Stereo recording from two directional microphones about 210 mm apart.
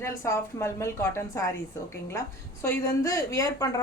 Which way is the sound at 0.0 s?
15° left (ahead or behind).